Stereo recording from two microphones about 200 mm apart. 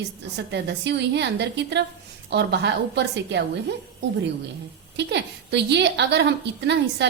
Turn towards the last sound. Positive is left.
turn(degrees=-60)  # may be behind; listen again after turning